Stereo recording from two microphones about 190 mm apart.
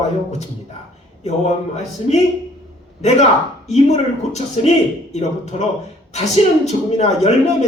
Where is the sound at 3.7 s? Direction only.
35° left (ahead or behind).